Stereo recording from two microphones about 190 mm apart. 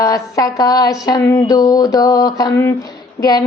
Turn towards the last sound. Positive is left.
turn(degrees=20)  # may be behind; listen again after turning